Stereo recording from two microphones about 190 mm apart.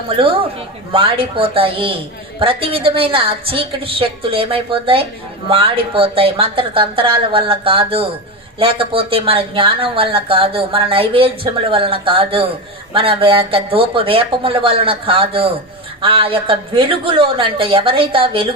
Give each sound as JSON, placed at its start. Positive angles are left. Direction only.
{"t": 0.1, "sound": "speech", "side_deg": -30}